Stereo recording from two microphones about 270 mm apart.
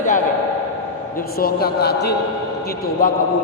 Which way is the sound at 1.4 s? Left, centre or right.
Left.